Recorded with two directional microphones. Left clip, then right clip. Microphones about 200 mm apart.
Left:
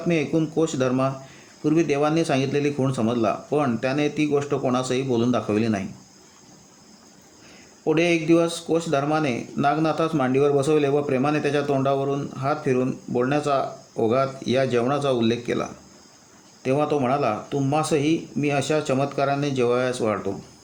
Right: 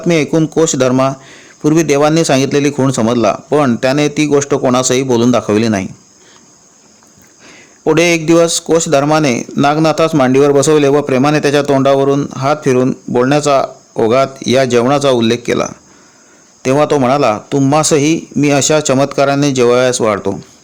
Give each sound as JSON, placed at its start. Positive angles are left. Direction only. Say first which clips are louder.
{"t": 0.1, "sound": "speech", "louder": "right 11 dB", "side_deg": -50}
{"t": 7.9, "sound": "speech", "louder": "right 10 dB", "side_deg": -50}